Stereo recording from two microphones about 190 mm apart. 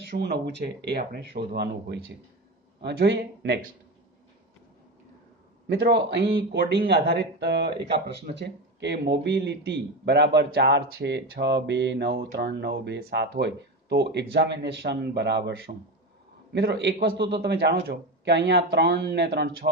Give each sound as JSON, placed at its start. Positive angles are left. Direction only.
{"t": 0.2, "sound": "speech", "side_deg": -60}
{"t": 5.7, "sound": "speech", "side_deg": -65}